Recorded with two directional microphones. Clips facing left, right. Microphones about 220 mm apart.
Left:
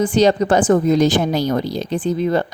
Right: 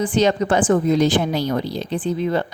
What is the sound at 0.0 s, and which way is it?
A woman's voice, 40° left (ahead or behind).